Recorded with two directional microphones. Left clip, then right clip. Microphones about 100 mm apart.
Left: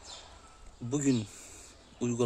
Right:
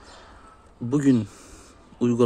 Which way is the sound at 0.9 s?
45° right (ahead or behind).